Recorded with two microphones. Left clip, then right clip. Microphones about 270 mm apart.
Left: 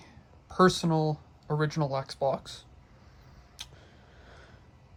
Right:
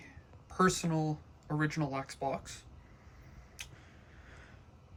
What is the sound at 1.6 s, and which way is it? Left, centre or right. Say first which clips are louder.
Speech: left 5 dB; centre.